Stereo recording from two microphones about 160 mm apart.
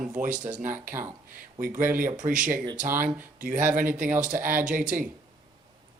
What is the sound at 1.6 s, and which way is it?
Speech, 55° right (ahead or behind).